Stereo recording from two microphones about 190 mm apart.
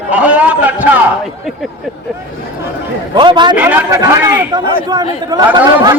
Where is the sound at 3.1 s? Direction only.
25° right (ahead or behind).